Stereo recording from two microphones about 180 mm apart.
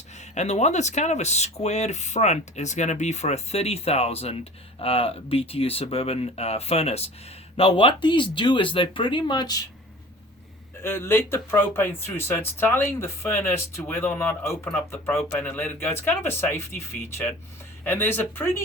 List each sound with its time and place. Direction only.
0.2 s speech: 40° left (ahead or behind); by 9.6 s 25° left (ahead or behind)
10.8 s speech: 15° left (ahead or behind)